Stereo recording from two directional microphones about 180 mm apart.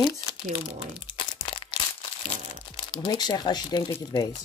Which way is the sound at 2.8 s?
25° left (ahead or behind).